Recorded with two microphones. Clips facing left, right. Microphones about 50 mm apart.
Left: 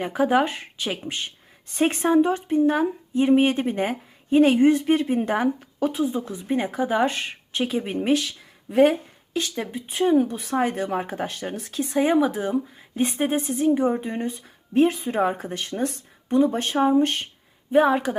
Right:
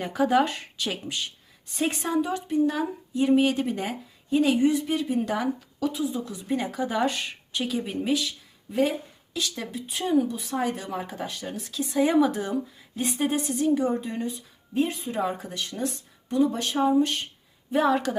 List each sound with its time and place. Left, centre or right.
0.0 s a woman's voice: left
1.0 s a woman's voice: left
8.0 s speech: left
9.6 s a woman's voice: left
10.2 s a woman's voice: left
12.2 s speech: centre
13.0 s a woman's voice: left
14.7 s speech: left
15.0 s a woman's voice: left
17.7 s a woman's voice: left